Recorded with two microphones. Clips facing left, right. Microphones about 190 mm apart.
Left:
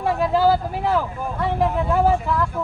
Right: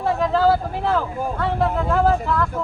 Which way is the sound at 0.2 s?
10° left (ahead or behind).